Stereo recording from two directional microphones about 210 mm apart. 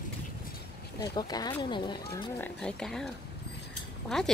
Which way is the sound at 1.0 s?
20° left (ahead or behind).